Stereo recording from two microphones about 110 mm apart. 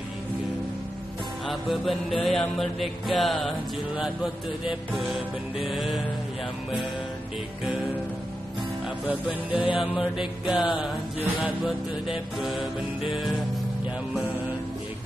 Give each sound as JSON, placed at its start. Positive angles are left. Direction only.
{"t": 1.5, "sound": "music", "side_deg": 0}
{"t": 9.5, "sound": "music", "side_deg": 55}
{"t": 9.8, "sound": "music", "side_deg": -5}